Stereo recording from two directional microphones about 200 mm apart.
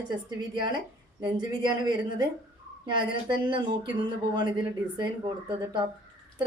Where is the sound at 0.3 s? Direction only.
20° right (ahead or behind).